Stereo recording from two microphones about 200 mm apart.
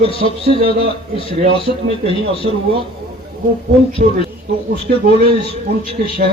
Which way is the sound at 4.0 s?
45° right (ahead or behind).